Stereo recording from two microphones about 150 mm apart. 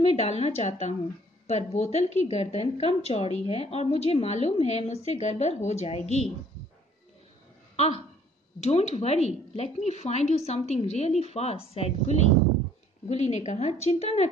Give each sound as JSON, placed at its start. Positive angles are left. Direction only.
{"t": 0.0, "sound": "speech", "side_deg": 45}
{"t": 7.7, "sound": "a sound", "side_deg": 45}
{"t": 8.6, "sound": "speech", "side_deg": 45}